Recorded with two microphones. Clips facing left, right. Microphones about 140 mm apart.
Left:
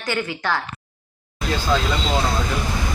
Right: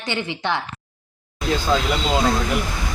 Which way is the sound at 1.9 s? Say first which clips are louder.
Right 1 dB; 15° right (ahead or behind).